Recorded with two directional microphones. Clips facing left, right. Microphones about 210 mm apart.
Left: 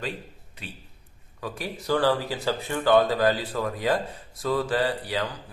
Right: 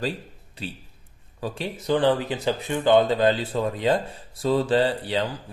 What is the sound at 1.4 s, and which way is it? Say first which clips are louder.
Speech: right 3 dB; 25° right (ahead or behind).